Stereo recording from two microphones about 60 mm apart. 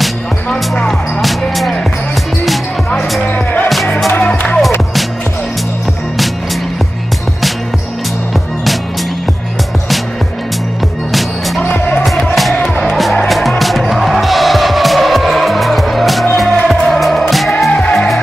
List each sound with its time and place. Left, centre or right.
0.5 s music: centre
1.2 s music: centre
3.3 s music: left
11.1 s music: centre
11.6 s music: left
12.0 s music: centre